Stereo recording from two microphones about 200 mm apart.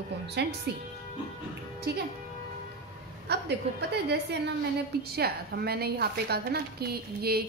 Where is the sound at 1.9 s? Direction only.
55° right (ahead or behind).